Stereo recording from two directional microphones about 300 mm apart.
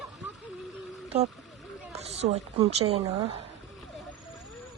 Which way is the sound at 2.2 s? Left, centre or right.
Centre.